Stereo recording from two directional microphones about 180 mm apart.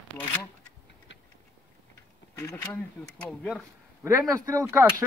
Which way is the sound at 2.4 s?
15° left (ahead or behind).